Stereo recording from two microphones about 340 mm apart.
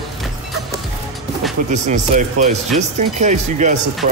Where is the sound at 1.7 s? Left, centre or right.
Right.